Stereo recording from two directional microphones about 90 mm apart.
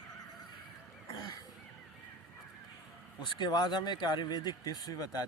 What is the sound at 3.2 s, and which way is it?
Speech, 55° left (ahead or behind).